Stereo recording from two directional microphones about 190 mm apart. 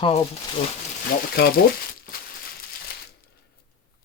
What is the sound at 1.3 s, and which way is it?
Speech, 55° left (ahead or behind).